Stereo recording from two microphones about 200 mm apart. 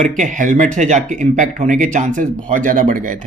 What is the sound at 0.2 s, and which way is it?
Speech, 40° right (ahead or behind).